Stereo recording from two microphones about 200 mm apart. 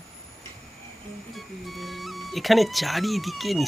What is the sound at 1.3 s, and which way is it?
Speech, centre (ahead or behind).